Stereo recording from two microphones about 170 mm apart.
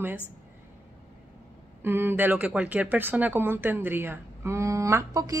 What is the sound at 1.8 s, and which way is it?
Speech, 10° right (ahead or behind).